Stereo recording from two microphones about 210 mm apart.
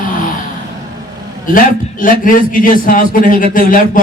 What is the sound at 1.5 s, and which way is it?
Speech, 40° left (ahead or behind).